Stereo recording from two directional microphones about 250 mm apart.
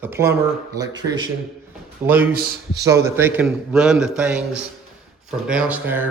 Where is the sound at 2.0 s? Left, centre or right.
Centre.